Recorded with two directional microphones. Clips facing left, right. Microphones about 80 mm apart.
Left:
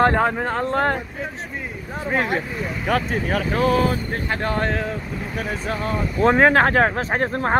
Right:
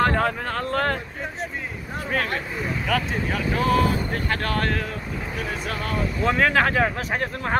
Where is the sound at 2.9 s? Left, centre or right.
Left.